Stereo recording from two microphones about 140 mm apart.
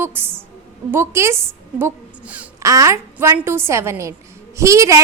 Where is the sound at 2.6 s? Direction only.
20° right (ahead or behind).